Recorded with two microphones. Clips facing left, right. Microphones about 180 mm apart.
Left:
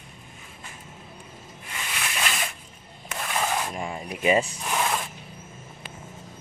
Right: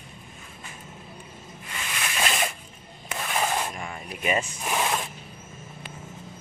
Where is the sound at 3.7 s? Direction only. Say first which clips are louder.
Left 4 dB; 25° left (ahead or behind).